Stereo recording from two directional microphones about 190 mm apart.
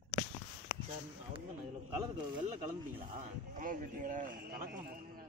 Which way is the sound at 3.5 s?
45° right (ahead or behind).